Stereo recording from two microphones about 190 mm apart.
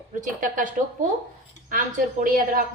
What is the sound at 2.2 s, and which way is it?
Speech, 50° right (ahead or behind).